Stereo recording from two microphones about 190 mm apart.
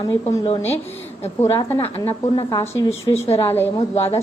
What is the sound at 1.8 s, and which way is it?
Speech, 30° left (ahead or behind).